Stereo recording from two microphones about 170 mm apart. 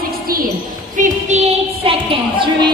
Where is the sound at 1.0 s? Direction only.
50° right (ahead or behind).